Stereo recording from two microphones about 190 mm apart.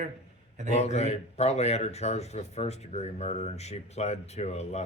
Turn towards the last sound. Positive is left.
turn(degrees=35)  # may be behind; listen again after turning